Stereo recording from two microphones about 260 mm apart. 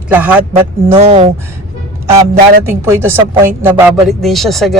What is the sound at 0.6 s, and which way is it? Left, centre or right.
Speech, right.